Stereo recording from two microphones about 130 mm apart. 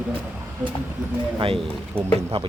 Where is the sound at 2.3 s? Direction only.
50° right (ahead or behind).